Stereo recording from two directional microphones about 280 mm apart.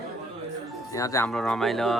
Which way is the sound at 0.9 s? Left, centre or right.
Centre.